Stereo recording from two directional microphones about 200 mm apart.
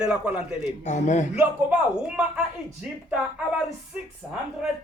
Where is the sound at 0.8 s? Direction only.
35° left (ahead or behind).